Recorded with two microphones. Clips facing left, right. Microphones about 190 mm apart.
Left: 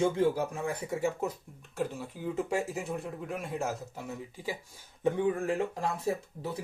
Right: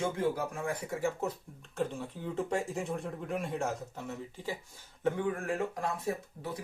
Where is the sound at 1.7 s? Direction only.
5° left (ahead or behind).